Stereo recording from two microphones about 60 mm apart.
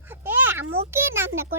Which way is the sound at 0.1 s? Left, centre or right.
Right.